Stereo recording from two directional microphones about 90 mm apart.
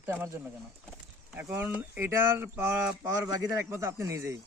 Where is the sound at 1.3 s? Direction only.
20° right (ahead or behind).